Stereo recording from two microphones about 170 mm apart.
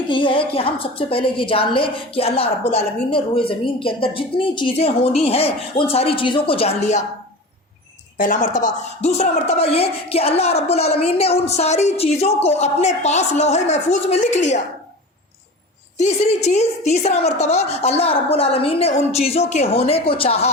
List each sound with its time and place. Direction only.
0.1 s a woman's voice: 30° left (ahead or behind)
8.2 s a woman's voice: 50° left (ahead or behind)
16.0 s a woman's voice: 40° left (ahead or behind)